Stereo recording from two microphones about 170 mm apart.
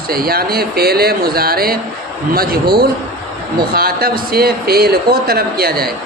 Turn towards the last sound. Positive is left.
turn(degrees=-65)  # may be behind; listen again after turning